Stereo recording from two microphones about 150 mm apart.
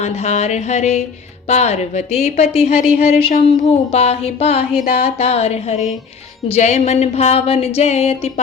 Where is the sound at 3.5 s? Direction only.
45° left (ahead or behind).